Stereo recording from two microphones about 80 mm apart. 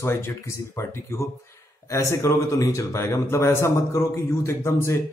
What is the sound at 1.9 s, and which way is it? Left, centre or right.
A man's voice, left.